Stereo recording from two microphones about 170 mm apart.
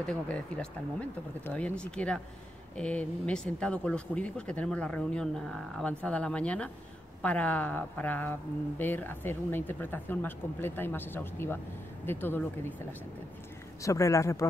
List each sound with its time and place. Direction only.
0.0 s speech: 5° left (ahead or behind)
13.8 s speech: 20° left (ahead or behind)